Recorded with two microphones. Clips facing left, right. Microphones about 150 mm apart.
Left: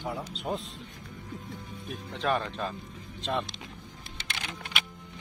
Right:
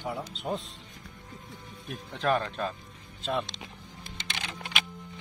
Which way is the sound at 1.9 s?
Centre (ahead or behind).